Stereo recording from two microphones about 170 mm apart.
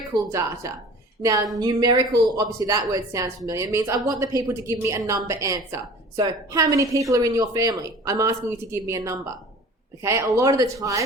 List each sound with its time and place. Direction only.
0.1 s a woman's voice: 15° right (ahead or behind)